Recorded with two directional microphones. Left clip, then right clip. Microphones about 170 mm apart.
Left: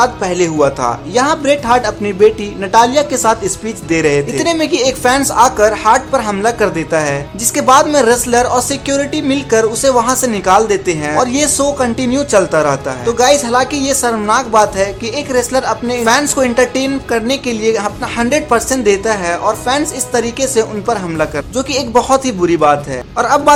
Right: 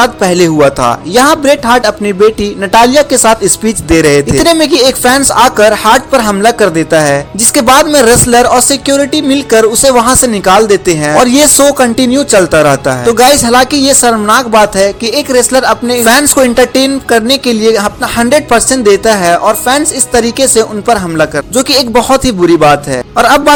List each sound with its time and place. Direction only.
0.0 s speech: 35° right (ahead or behind)
22.1 s speech: 20° right (ahead or behind)
22.6 s speech: 40° right (ahead or behind)